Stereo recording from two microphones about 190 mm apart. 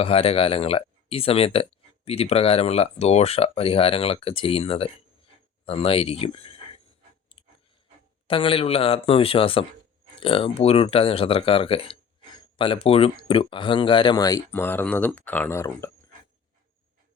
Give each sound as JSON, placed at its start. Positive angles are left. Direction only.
{"t": 0.0, "sound": "speech", "side_deg": 30}
{"t": 8.3, "sound": "speech", "side_deg": 30}